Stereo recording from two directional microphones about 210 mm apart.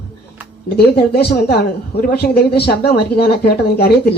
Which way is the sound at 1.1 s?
50° left (ahead or behind).